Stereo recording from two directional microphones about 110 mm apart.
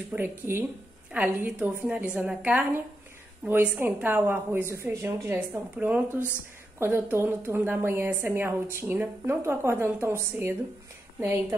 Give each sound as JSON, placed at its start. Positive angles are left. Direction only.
{"t": 0.1, "sound": "a woman's voice", "side_deg": -20}